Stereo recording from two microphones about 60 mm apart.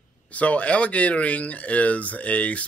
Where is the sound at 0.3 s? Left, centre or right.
Left.